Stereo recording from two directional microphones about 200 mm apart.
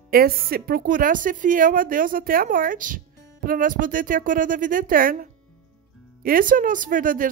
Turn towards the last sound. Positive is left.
turn(degrees=-40)  # may be behind; listen again after turning